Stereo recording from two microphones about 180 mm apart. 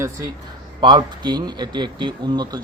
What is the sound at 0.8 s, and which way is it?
A man's voice, 25° right (ahead or behind).